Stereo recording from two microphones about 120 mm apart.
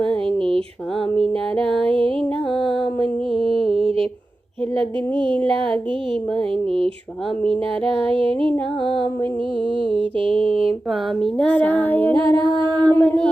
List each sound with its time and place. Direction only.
0.0 s a sound: 5° left (ahead or behind)
1.5 s music: 5° left (ahead or behind)
1.9 s music: 50° right (ahead or behind)
3.0 s mantra: 5° left (ahead or behind)
5.1 s mantra: 45° right (ahead or behind)
5.4 s child singing: 10° left (ahead or behind)
6.5 s mantra: 50° right (ahead or behind)
7.4 s child singing: 10° left (ahead or behind)
10.2 s mantra: 50° right (ahead or behind)
11.2 s child singing: 10° left (ahead or behind)
12.3 s a sound: 25° left (ahead or behind)